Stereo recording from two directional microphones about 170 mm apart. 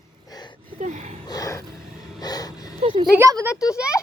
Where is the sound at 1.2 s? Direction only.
20° left (ahead or behind).